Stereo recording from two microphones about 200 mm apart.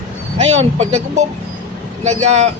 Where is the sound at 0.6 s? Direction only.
35° right (ahead or behind).